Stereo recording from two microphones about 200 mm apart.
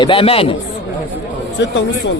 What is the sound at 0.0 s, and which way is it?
Speech, 25° left (ahead or behind).